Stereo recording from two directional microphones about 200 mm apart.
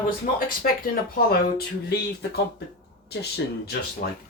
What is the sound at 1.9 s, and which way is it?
Speech, 55° left (ahead or behind).